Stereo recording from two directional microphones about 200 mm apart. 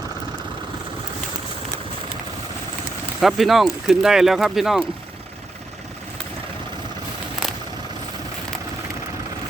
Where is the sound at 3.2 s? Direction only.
Centre (ahead or behind).